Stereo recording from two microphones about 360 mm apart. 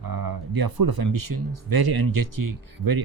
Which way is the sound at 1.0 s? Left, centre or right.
Right.